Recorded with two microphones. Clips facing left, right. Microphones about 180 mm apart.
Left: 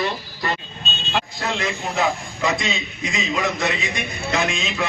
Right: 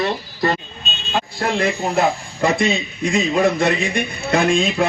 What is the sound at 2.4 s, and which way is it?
A man's voice, 55° right (ahead or behind).